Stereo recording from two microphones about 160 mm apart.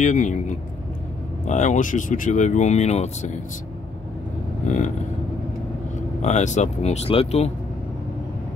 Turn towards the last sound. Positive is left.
turn(degrees=40)  # may be behind; listen again after turning